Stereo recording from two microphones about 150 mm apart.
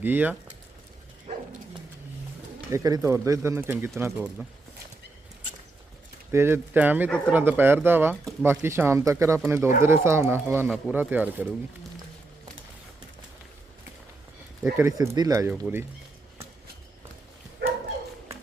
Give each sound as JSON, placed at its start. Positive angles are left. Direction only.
{"t": 0.0, "sound": "speech", "side_deg": -10}
{"t": 2.7, "sound": "speech", "side_deg": -20}
{"t": 6.3, "sound": "speech", "side_deg": -15}
{"t": 14.6, "sound": "speech", "side_deg": -20}